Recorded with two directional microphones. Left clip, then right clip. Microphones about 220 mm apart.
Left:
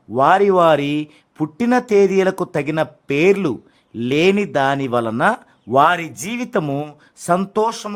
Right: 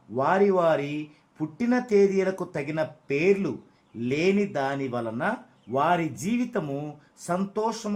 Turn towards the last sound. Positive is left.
turn(degrees=45)  # may be behind; listen again after turning